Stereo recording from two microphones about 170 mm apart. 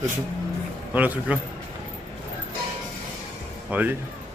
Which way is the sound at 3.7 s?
10° right (ahead or behind).